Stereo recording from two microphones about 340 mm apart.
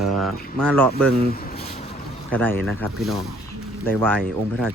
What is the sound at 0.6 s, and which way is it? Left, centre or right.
Speech, centre.